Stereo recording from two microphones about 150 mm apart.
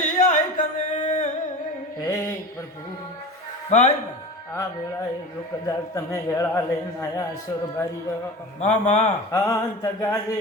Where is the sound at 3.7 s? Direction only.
50° left (ahead or behind).